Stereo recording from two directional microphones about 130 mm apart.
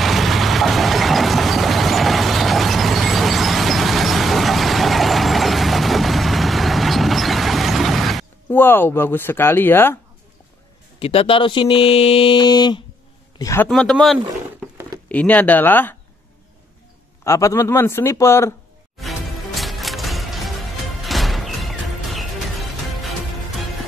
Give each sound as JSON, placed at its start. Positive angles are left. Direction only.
{"t": 0.0, "sound": "vehicle", "side_deg": 0}
{"t": 8.5, "sound": "speech", "side_deg": 15}
{"t": 11.0, "sound": "speech", "side_deg": 45}
{"t": 13.4, "sound": "a man's voice", "side_deg": 20}
{"t": 13.7, "sound": "speech", "side_deg": 5}
{"t": 17.2, "sound": "speech", "side_deg": 25}
{"t": 18.9, "sound": "music", "side_deg": 0}